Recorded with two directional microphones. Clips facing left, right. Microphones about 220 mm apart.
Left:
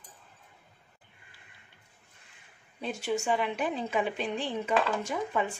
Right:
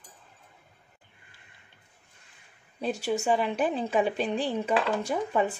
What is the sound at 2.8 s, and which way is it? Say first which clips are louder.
A woman's voice: right 3 dB; 35° right (ahead or behind).